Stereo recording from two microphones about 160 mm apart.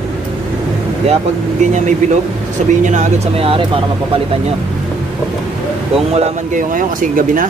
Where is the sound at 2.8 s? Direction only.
50° right (ahead or behind).